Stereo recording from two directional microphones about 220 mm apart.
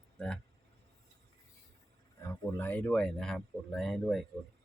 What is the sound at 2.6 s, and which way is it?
Speech, 5° left (ahead or behind).